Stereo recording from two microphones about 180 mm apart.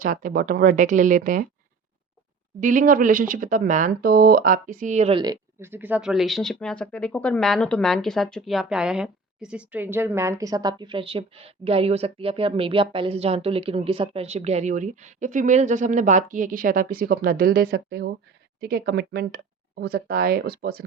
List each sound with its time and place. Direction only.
0.0 s speech: 50° right (ahead or behind)
2.6 s speech: 45° right (ahead or behind)
5.1 s speech: 20° right (ahead or behind); by 20.8 s 60° right (ahead or behind)